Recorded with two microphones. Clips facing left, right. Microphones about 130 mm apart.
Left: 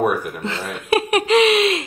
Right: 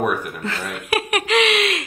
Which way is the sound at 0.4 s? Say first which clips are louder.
Left 1 dB; 25° left (ahead or behind).